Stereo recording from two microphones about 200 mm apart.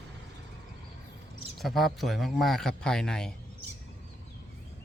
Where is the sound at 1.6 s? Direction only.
Centre (ahead or behind).